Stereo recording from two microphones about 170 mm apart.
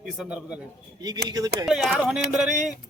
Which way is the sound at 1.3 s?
20° right (ahead or behind).